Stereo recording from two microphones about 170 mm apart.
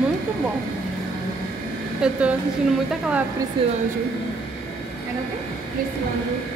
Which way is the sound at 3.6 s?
30° right (ahead or behind).